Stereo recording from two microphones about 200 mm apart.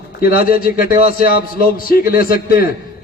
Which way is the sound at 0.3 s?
45° left (ahead or behind).